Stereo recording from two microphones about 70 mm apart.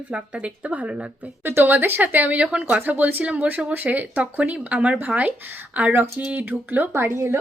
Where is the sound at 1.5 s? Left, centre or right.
Right.